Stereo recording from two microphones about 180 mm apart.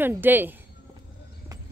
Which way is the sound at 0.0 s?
10° right (ahead or behind).